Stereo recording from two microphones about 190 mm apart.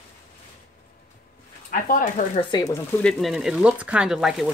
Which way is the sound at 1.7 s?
45° left (ahead or behind).